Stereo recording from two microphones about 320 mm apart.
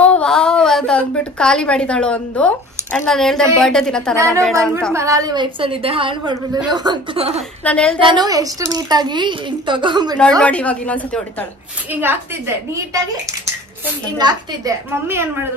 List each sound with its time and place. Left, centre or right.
0.0 s a woman's voice: centre
4.9 s a woman's voice: centre
7.6 s a woman's voice: centre
8.0 s a woman's voice: centre
10.4 s a woman's voice: centre
11.9 s a woman's voice: centre
14.1 s a woman's voice: centre